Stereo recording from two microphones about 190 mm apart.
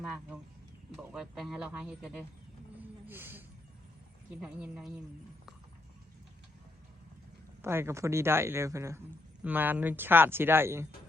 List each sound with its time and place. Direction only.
0.9 s speech: centre (ahead or behind)
7.6 s speech: 15° right (ahead or behind)